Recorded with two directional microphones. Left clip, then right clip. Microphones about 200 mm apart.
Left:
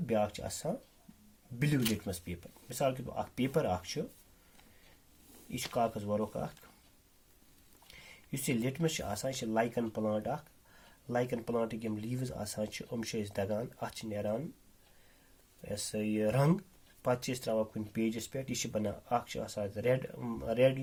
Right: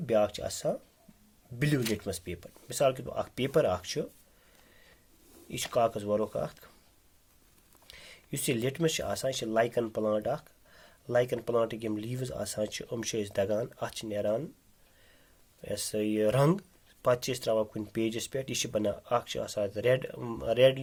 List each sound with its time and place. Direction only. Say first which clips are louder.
0.0 s speech: right 6 dB; 45° right (ahead or behind)
5.5 s speech: right 5 dB; 50° right (ahead or behind)
7.9 s speech: right 4 dB; 45° right (ahead or behind)
15.6 s speech: right 5 dB; 45° right (ahead or behind)